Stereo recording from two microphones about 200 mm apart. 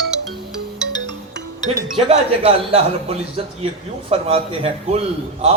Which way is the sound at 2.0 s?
30° right (ahead or behind).